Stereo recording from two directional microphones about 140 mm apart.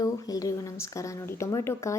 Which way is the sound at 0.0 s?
25° left (ahead or behind).